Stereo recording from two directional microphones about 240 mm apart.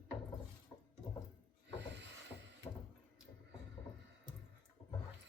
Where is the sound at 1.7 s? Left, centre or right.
Right.